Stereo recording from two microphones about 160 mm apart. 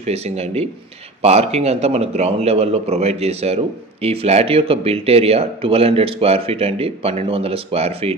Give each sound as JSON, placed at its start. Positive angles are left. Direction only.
{"t": 0.0, "sound": "a man's voice", "side_deg": -40}